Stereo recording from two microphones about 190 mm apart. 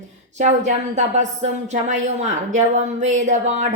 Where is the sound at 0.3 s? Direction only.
40° right (ahead or behind).